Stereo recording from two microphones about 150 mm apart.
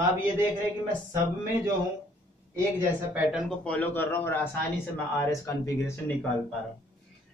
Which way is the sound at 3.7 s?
10° left (ahead or behind).